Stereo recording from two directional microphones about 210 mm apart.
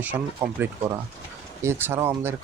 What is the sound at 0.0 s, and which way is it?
Speech, 10° right (ahead or behind).